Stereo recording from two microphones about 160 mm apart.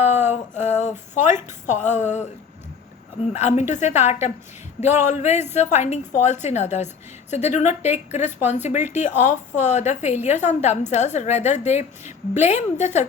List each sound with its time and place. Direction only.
0.0 s a sound: 45° left (ahead or behind)
1.7 s a woman's voice: 50° left (ahead or behind)
3.4 s a woman's voice: 45° left (ahead or behind)